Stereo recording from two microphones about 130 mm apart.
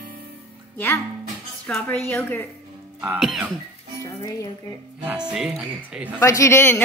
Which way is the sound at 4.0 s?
30° left (ahead or behind).